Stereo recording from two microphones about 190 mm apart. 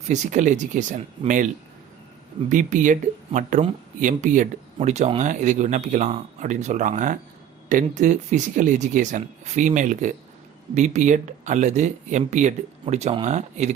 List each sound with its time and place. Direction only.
0.0 s speech: 40° right (ahead or behind)
2.5 s speech: 40° right (ahead or behind)